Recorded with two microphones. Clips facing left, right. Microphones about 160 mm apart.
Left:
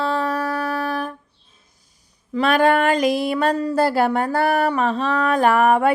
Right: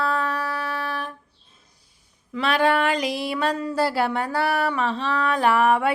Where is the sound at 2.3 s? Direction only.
45° left (ahead or behind).